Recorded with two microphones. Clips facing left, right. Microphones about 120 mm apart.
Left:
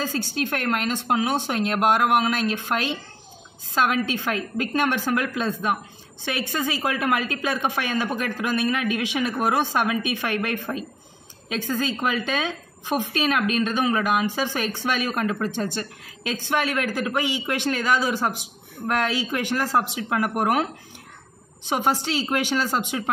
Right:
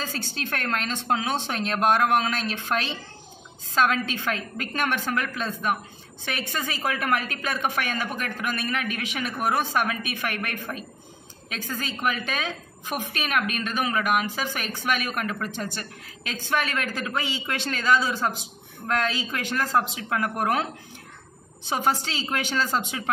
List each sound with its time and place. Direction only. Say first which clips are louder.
0.0 s a woman's voice: left 6 dB; 15° left (ahead or behind)
21.6 s speech: left 2 dB; 15° left (ahead or behind)